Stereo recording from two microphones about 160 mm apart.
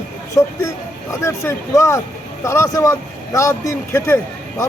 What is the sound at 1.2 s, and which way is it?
Speech, 20° left (ahead or behind).